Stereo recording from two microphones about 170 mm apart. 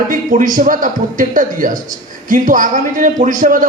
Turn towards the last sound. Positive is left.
turn(degrees=-50)  # may be behind; listen again after turning